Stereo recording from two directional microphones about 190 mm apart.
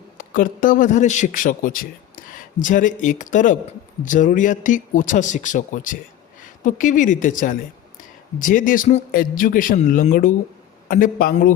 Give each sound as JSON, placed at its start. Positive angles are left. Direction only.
{"t": 0.2, "sound": "a man's voice", "side_deg": 45}